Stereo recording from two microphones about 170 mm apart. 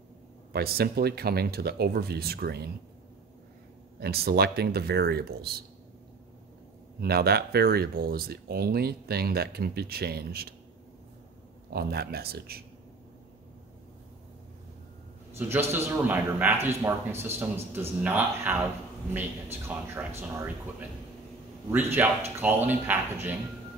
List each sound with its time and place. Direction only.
0.5 s speech: 65° right (ahead or behind)
4.0 s speech: 65° right (ahead or behind)
7.0 s speech: 65° right (ahead or behind)
11.7 s speech: 70° right (ahead or behind)
15.3 s a man's voice: 15° right (ahead or behind)
19.7 s a man's voice: 10° right (ahead or behind)
21.6 s a man's voice: 15° right (ahead or behind)